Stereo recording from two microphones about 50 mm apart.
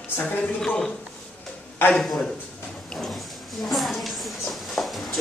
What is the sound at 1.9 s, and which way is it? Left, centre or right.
Speech, centre.